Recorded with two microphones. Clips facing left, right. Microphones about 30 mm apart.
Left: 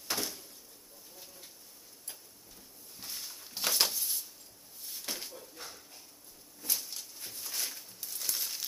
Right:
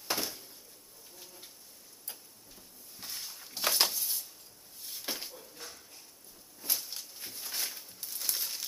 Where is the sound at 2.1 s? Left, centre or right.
Centre.